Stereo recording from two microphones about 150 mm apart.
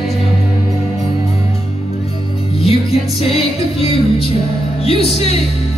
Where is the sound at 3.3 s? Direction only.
40° left (ahead or behind).